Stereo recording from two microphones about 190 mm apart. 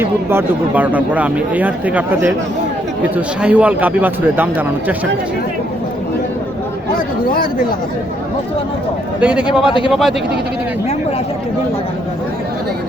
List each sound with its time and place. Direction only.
0.0 s speech: 10° right (ahead or behind)
9.2 s speech: 5° right (ahead or behind)
9.6 s speech: 25° left (ahead or behind)
9.9 s a man's voice: centre (ahead or behind)